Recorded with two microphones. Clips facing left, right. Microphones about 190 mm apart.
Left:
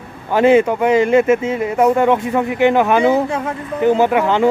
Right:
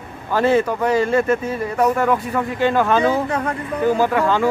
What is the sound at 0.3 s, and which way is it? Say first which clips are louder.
A man's voice: left 5 dB; 20° left (ahead or behind).